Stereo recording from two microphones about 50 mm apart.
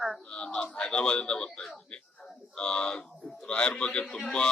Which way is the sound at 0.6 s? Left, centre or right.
Left.